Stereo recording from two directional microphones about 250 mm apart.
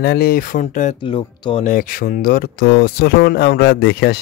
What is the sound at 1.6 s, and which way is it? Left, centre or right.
Speech, left.